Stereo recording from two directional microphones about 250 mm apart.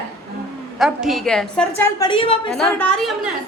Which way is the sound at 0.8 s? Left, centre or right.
Centre.